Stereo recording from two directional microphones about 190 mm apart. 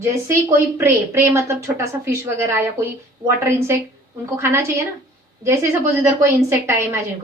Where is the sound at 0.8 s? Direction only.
15° right (ahead or behind).